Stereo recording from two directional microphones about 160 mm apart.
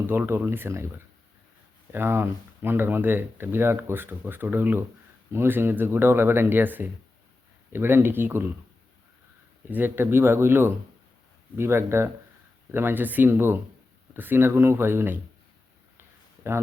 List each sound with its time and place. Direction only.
0.1 s speech: 15° right (ahead or behind)
9.6 s speech: 10° right (ahead or behind)
16.0 s a sound: 15° right (ahead or behind)